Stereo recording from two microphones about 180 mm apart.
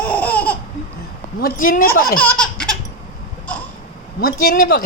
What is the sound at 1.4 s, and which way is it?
Speech, 55° left (ahead or behind).